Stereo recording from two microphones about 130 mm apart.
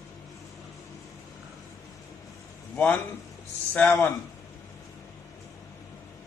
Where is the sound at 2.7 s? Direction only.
10° left (ahead or behind).